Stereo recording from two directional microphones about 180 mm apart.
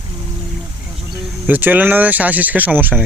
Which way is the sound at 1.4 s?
10° right (ahead or behind).